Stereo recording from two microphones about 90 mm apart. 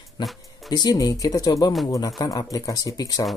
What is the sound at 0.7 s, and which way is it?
Speech, 45° left (ahead or behind).